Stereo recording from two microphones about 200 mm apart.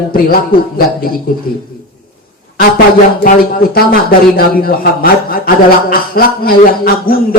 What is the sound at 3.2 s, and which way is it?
A man's voice, 45° left (ahead or behind).